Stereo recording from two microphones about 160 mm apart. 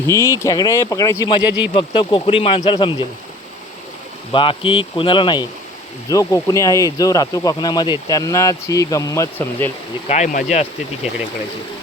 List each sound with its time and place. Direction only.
0.1 s speech: 15° left (ahead or behind)
4.3 s speech: 35° left (ahead or behind); by 9.7 s 15° left (ahead or behind)
10.1 s speech: 50° left (ahead or behind)